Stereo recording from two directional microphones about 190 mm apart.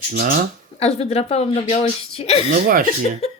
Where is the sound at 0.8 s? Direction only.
30° left (ahead or behind).